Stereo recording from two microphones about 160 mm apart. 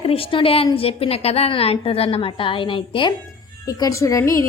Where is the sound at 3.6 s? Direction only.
20° left (ahead or behind).